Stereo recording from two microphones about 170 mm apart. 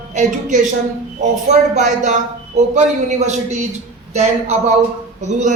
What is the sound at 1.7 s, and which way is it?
A man's voice, 45° right (ahead or behind).